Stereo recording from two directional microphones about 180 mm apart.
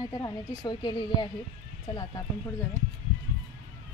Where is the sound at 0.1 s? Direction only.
20° left (ahead or behind).